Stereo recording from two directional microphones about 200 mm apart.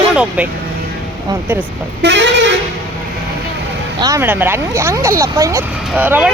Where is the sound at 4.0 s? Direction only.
15° right (ahead or behind).